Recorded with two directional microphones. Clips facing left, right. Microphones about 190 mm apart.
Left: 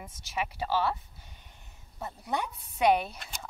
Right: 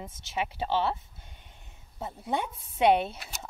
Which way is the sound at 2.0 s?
25° right (ahead or behind).